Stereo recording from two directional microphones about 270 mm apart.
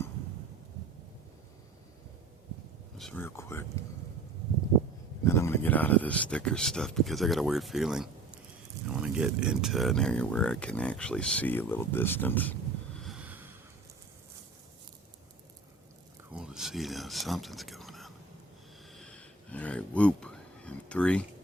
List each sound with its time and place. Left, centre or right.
3.0 s speech: centre
5.2 s speech: centre
13.0 s snort: centre
16.3 s a sound: centre